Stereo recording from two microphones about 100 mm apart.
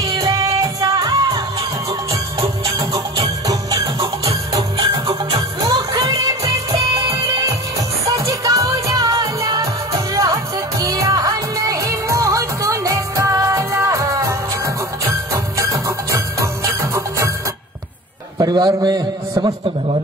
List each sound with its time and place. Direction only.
0.2 s music: 35° right (ahead or behind)
2.4 s music: 35° right (ahead or behind)
4.7 s music: 60° right (ahead or behind)
5.6 s music: 45° right (ahead or behind)
6.1 s music: 35° right (ahead or behind)
18.4 s a man's voice: 45° right (ahead or behind)